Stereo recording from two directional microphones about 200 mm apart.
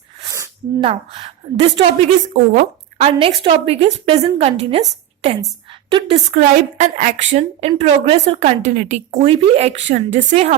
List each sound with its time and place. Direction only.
0.8 s a woman's voice: 30° right (ahead or behind)
2.2 s speech: 40° right (ahead or behind)
3.1 s a woman's voice: 25° right (ahead or behind)
5.9 s a woman's voice: 30° right (ahead or behind)